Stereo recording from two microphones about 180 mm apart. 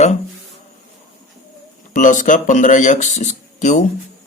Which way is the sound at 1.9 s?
45° left (ahead or behind).